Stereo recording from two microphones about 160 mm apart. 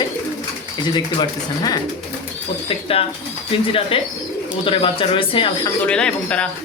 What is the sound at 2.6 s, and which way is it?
Speech, 35° left (ahead or behind).